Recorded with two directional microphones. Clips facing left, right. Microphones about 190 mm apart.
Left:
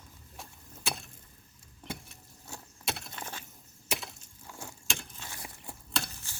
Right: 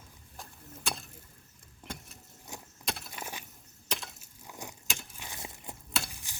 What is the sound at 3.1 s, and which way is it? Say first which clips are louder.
Glass: right 1 dB; 15° right (ahead or behind).